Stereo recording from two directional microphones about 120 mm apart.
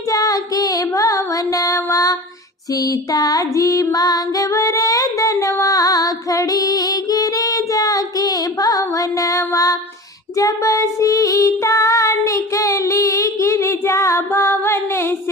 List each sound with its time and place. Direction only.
0.1 s female singing: 30° left (ahead or behind)
10.3 s child singing: 25° left (ahead or behind)